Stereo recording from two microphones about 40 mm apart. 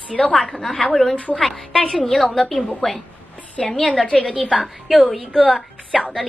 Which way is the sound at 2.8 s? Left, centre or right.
Centre.